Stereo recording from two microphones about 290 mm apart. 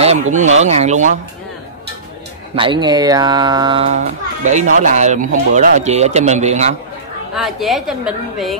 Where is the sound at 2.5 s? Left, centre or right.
Centre.